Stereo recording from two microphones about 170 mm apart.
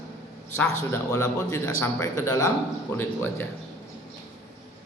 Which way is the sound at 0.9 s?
15° left (ahead or behind).